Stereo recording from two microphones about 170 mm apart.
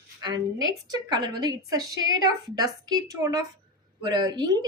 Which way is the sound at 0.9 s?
25° right (ahead or behind).